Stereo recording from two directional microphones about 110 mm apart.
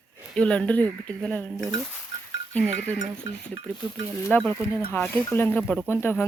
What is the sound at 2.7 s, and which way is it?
Speech, 85° right.